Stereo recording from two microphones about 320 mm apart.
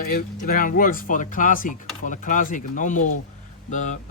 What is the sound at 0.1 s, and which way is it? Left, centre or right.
Speech, left.